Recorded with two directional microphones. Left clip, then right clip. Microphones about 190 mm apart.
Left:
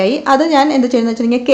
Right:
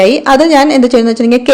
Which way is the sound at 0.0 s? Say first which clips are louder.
Right 5 dB; 35° right (ahead or behind).